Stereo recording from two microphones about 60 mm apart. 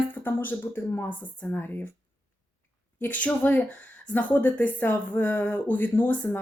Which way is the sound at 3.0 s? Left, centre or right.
Left.